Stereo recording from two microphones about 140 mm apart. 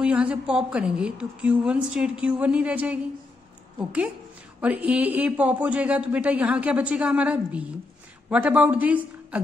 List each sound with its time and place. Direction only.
0.0 s speech: 10° right (ahead or behind)
4.6 s speech: 10° right (ahead or behind)